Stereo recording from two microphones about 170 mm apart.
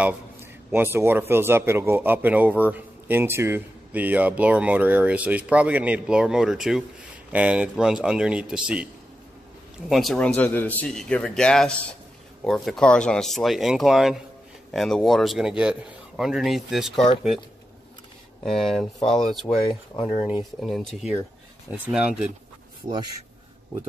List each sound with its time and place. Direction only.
0.7 s speech: 15° right (ahead or behind)
9.8 s speech: centre (ahead or behind)
18.4 s speech: centre (ahead or behind)
19.4 s speech: 30° left (ahead or behind)
20.6 s speech: centre (ahead or behind)
22.8 s speech: 20° right (ahead or behind)